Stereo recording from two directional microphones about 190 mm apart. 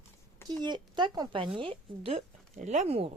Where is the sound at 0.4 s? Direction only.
20° right (ahead or behind).